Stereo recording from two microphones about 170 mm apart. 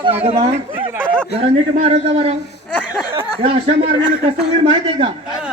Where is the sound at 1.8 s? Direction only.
40° right (ahead or behind).